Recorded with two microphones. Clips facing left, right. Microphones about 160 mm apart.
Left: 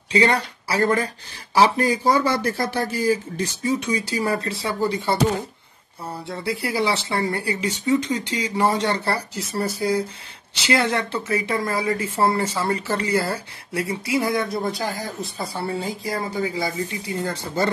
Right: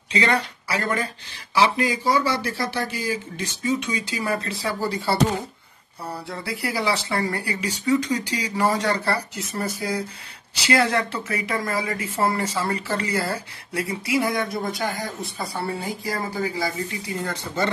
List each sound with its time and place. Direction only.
0.1 s a woman's voice: 30° left (ahead or behind)
6.2 s a woman's voice: 25° left (ahead or behind)
15.8 s a woman's voice: 25° left (ahead or behind)